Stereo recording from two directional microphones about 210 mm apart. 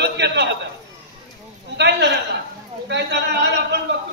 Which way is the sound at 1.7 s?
55° right (ahead or behind).